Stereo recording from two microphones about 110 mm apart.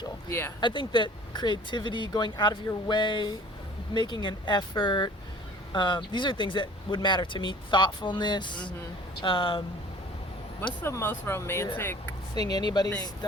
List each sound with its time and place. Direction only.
0.3 s speech: 20° left (ahead or behind)
0.6 s speech: 50° left (ahead or behind)
10.8 s speech: 20° left (ahead or behind)
12.3 s speech: 35° left (ahead or behind)